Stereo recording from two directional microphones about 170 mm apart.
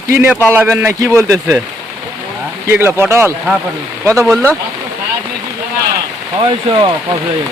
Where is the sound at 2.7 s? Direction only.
15° right (ahead or behind).